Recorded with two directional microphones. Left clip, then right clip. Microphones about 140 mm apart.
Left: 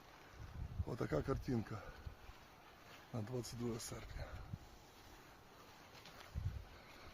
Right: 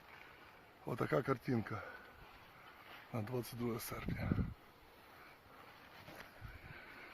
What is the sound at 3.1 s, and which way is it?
Speech, 35° right (ahead or behind).